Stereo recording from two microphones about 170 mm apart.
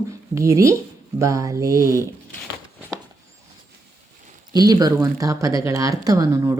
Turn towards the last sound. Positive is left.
turn(degrees=-20)  # may be behind; listen again after turning